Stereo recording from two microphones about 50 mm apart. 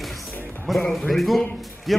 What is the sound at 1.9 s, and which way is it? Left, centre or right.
Speech, centre.